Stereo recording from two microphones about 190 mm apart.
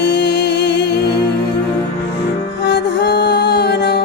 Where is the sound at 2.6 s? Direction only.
60° left (ahead or behind).